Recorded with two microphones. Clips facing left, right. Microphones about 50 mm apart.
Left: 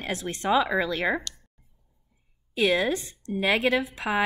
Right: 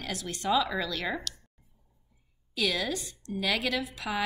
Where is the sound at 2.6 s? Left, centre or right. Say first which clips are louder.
Left 7 dB; left.